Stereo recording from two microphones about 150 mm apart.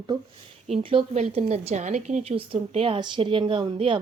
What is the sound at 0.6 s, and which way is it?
A woman's voice, 40° right (ahead or behind).